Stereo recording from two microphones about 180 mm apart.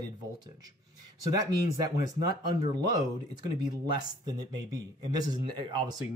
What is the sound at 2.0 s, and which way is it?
Speech, 20° right (ahead or behind).